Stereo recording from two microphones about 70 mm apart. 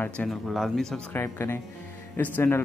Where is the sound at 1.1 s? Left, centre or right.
Left.